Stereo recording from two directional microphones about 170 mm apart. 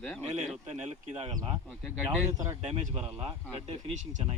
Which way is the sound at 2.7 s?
35° right (ahead or behind).